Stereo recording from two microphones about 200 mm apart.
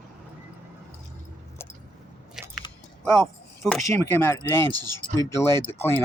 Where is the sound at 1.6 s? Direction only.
10° left (ahead or behind).